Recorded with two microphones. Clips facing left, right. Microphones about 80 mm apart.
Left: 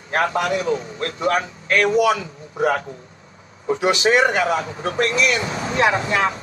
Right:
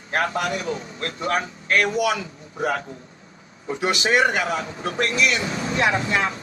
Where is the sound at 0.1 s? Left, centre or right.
Left.